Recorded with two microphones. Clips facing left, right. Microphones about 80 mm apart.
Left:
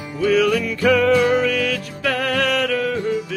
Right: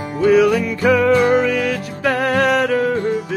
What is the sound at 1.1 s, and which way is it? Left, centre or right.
Music, right.